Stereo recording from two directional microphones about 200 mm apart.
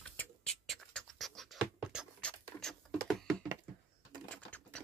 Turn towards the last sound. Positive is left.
turn(degrees=5)  # may be behind; listen again after turning